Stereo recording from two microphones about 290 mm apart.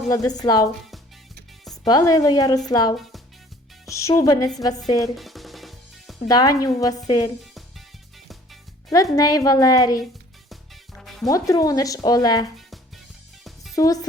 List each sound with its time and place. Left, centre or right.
0.1 s speech: centre
1.7 s speech: centre
2.9 s speech: centre
3.8 s speech: centre
5.1 s music: centre
6.2 s speech: centre
8.9 s speech: centre
10.5 s music: centre
11.3 s speech: centre
13.7 s speech: centre